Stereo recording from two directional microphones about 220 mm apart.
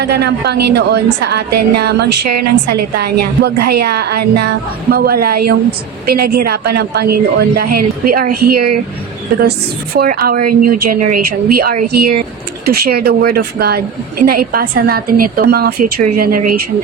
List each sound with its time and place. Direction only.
0.0 s speech: 50° right (ahead or behind)
9.9 s speech: 45° right (ahead or behind)